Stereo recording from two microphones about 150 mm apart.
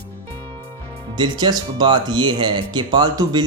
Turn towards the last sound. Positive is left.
turn(degrees=-30)  # may be behind; listen again after turning